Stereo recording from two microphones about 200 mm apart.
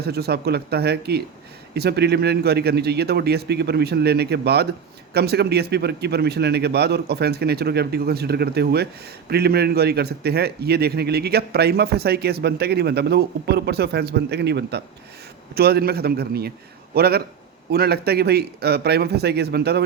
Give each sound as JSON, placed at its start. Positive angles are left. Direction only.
{"t": 0.0, "sound": "a man's voice", "side_deg": -50}